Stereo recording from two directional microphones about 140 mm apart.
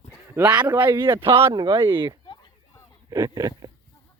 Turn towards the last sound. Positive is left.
turn(degrees=-25)  # may be behind; listen again after turning